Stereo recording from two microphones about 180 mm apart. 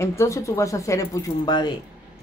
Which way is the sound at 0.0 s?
15° left (ahead or behind).